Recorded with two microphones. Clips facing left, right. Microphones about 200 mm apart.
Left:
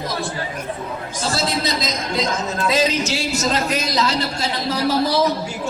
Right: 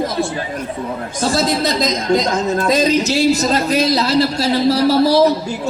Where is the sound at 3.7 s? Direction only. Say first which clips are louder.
Right 6 dB; 35° right (ahead or behind).